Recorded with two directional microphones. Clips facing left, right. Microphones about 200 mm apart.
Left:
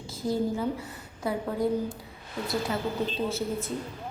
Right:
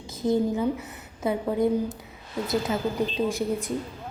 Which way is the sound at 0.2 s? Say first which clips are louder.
Right 4 dB; 20° right (ahead or behind).